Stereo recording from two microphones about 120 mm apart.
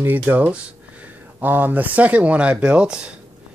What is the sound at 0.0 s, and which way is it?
Speech, 15° right (ahead or behind).